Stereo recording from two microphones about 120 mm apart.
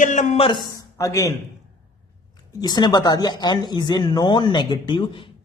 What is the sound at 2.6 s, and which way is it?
Speech, 35° left (ahead or behind).